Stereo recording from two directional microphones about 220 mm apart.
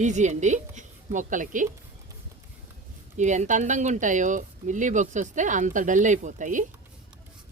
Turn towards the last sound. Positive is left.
turn(degrees=-35)  # may be behind; listen again after turning